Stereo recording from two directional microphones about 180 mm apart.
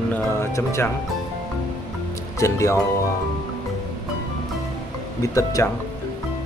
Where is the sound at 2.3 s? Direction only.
15° left (ahead or behind).